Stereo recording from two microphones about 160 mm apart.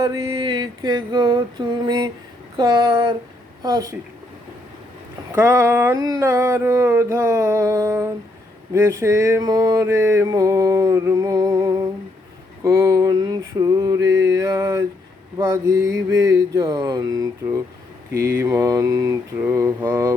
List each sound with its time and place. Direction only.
0.0 s mantra: 20° right (ahead or behind)
5.3 s a sound: 15° right (ahead or behind)
8.7 s mantra: 15° right (ahead or behind)